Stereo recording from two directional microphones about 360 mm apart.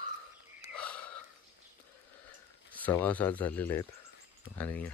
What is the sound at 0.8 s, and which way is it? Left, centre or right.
Gasp, centre.